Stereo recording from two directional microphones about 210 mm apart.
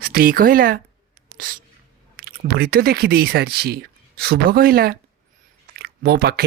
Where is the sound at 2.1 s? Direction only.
45° right (ahead or behind).